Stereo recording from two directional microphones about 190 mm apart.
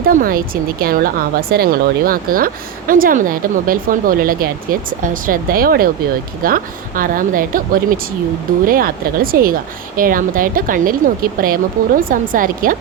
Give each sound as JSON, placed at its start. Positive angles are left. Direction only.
{"t": 0.0, "sound": "a woman's voice", "side_deg": -50}